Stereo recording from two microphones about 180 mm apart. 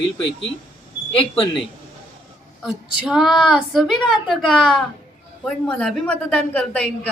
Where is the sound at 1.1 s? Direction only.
30° left (ahead or behind).